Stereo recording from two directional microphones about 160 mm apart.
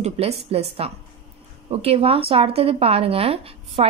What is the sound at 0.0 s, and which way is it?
A woman's voice, 40° right (ahead or behind).